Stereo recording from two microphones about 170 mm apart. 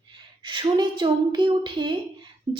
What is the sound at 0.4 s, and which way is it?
A woman's voice, 25° right (ahead or behind).